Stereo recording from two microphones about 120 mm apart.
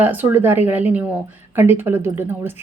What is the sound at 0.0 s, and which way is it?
A woman's voice, 15° right (ahead or behind).